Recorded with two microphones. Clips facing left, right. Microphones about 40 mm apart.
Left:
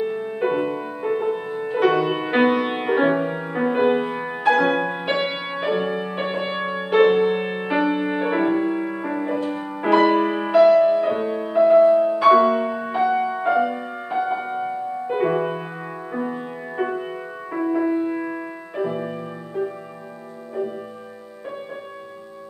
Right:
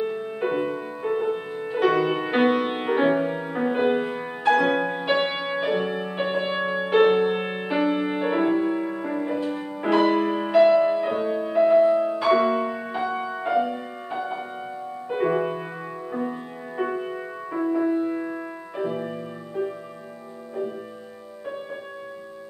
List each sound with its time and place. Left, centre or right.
0.0 s music: centre
10.5 s music: centre